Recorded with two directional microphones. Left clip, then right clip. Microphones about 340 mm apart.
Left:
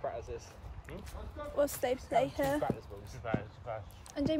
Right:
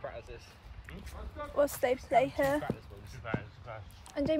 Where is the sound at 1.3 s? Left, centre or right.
Centre.